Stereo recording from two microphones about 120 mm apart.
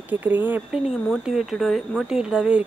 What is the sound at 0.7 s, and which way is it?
Speech, 5° right (ahead or behind).